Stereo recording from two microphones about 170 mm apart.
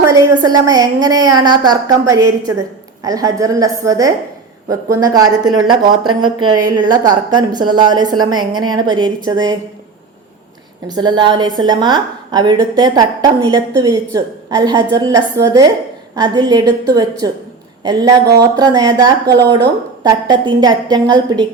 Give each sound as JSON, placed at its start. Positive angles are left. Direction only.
{"t": 0.0, "sound": "speech", "side_deg": -20}
{"t": 10.8, "sound": "speech", "side_deg": -25}